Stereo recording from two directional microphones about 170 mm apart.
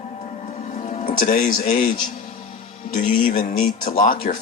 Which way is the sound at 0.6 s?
45° left (ahead or behind).